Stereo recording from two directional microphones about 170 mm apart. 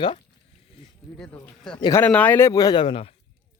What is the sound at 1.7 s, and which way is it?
Speech, 25° left (ahead or behind).